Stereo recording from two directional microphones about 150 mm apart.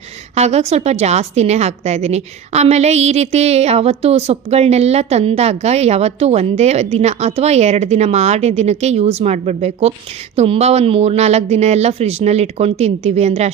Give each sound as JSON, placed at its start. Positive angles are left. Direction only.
{"t": 0.3, "sound": "a woman's voice", "side_deg": -45}